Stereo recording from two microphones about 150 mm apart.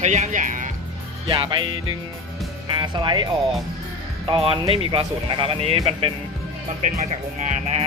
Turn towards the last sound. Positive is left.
turn(degrees=-45)  # may be behind; listen again after turning